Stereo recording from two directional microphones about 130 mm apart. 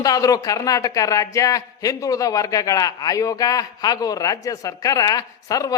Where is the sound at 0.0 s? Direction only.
25° left (ahead or behind).